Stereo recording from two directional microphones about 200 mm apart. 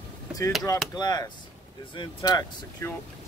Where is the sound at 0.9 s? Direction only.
20° left (ahead or behind).